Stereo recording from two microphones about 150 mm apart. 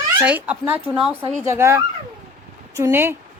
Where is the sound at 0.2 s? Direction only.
10° right (ahead or behind).